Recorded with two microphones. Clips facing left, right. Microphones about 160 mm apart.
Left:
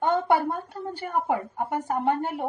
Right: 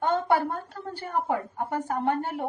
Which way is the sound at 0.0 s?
15° left (ahead or behind).